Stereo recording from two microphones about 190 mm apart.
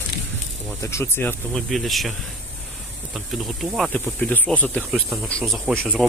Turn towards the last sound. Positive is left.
turn(degrees=-5)  # may be behind; listen again after turning